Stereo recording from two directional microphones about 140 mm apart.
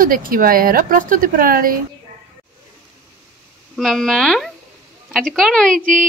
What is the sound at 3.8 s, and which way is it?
Speech, centre (ahead or behind).